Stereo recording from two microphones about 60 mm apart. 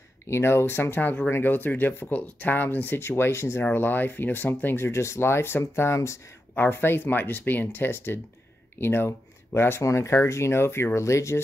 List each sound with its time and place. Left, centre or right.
0.3 s speech: left
3.6 s speech: left
6.5 s speech: left